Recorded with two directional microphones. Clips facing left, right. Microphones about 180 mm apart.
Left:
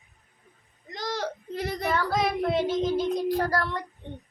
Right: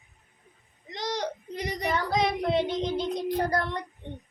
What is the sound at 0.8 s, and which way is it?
Whimper, 20° right (ahead or behind).